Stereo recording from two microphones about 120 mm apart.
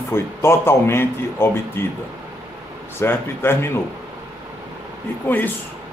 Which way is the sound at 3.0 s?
20° left (ahead or behind).